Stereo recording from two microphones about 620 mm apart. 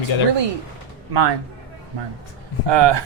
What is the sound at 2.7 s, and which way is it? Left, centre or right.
Speech, right.